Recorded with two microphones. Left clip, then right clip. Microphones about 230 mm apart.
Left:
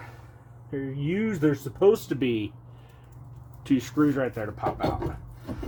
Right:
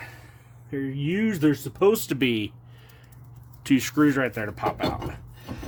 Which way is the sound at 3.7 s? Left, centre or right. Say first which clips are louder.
Right 3 dB; right.